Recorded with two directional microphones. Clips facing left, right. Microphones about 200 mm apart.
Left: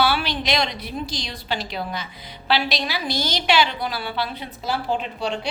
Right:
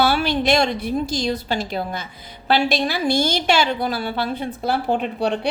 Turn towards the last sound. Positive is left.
turn(degrees=-55)  # may be behind; listen again after turning